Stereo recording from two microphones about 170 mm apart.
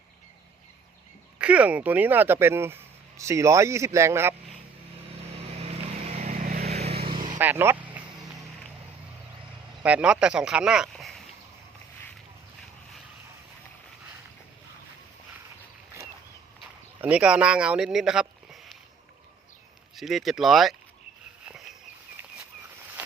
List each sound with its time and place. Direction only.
1.4 s speech: 5° right (ahead or behind)
6.0 s vehicle: 40° right (ahead or behind)
6.3 s vehicle: 60° right (ahead or behind)
6.6 s vehicle: 40° right (ahead or behind)
7.3 s vehicle: 10° right (ahead or behind)
9.8 s speech: 5° right (ahead or behind)
17.0 s speech: 5° right (ahead or behind)
20.0 s speech: centre (ahead or behind)